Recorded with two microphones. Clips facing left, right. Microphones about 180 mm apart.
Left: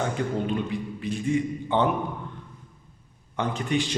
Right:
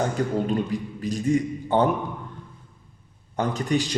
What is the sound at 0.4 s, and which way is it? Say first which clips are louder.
A man's voice: right 2 dB; 40° right (ahead or behind).